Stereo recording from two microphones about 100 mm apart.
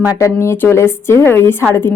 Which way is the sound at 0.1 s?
30° left (ahead or behind).